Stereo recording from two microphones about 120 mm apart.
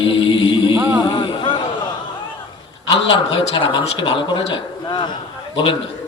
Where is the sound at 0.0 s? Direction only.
45° left (ahead or behind).